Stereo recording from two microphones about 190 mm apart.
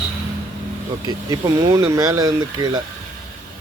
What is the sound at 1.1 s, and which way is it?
Speech, 20° right (ahead or behind).